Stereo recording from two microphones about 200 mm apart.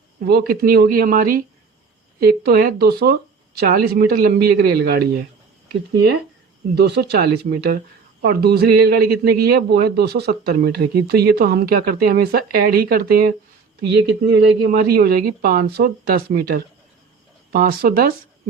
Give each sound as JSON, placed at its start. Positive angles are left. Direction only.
{"t": 0.3, "sound": "a man's voice", "side_deg": -50}
{"t": 6.7, "sound": "a man's voice", "side_deg": -55}